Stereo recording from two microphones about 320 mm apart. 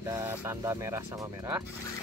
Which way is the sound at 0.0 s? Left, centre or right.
Centre.